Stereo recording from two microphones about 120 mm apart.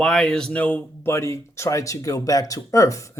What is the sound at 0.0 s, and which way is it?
Speech, 5° left (ahead or behind).